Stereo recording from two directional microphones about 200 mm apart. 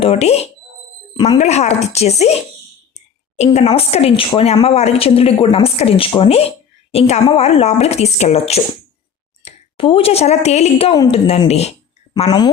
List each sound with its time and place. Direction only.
0.0 s speech: 30° left (ahead or behind)
1.1 s speech: 20° left (ahead or behind)
1.4 s speech: 35° left (ahead or behind)